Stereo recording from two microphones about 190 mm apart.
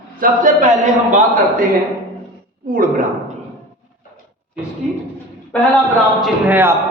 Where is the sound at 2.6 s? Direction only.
45° right (ahead or behind).